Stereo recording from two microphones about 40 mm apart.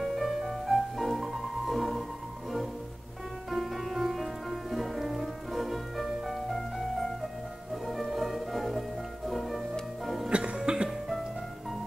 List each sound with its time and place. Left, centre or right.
0.0 s music: centre
3.4 s music: centre
10.3 s music: right